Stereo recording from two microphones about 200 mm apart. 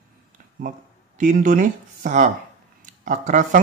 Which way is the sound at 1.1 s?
40° right (ahead or behind).